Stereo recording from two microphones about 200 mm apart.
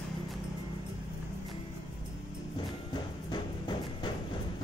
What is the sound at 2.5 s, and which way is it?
Music, 25° left (ahead or behind).